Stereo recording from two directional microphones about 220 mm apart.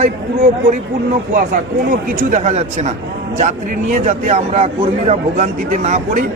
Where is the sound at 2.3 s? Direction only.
30° right (ahead or behind).